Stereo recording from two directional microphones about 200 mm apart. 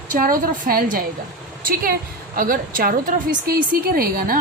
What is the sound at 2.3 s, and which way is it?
A woman's voice, 45° right (ahead or behind).